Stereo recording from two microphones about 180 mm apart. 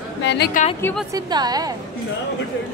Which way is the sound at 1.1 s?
20° right (ahead or behind).